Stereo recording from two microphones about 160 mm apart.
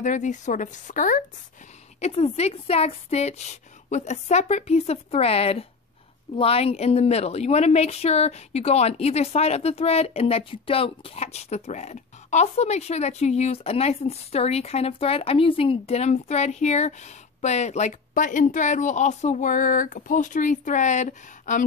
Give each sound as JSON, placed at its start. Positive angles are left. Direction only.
{"t": 0.0, "sound": "speech", "side_deg": 50}
{"t": 2.0, "sound": "a woman's voice", "side_deg": 40}